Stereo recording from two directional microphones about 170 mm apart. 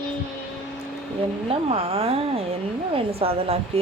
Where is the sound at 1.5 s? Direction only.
35° right (ahead or behind).